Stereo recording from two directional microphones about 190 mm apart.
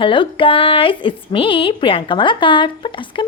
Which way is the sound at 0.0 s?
25° left (ahead or behind).